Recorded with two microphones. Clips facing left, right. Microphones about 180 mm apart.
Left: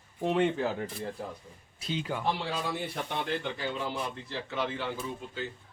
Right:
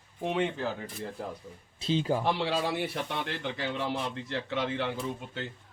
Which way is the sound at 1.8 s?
30° right (ahead or behind).